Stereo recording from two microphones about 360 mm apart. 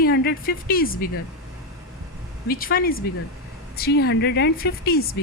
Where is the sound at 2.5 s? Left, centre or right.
Left.